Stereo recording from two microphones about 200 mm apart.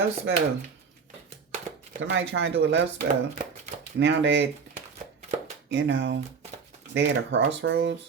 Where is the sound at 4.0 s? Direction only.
65° right (ahead or behind).